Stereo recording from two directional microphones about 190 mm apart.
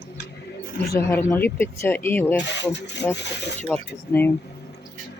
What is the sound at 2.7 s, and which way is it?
Speech, 65° left (ahead or behind).